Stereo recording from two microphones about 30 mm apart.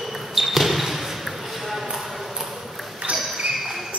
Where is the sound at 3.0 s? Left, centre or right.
Right.